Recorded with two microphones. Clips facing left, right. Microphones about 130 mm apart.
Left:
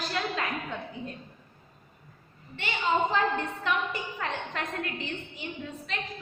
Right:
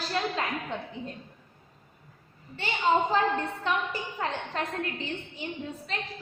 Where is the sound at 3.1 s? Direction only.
35° right (ahead or behind).